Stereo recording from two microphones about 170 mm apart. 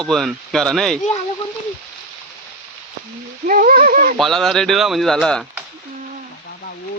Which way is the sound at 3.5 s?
55° right (ahead or behind).